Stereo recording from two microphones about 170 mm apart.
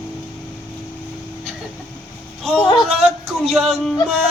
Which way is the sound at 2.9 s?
35° right (ahead or behind).